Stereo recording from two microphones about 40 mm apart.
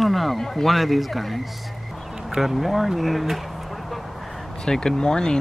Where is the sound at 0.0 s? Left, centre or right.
Centre.